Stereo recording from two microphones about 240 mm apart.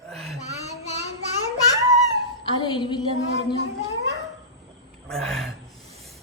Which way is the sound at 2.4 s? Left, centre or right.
Centre.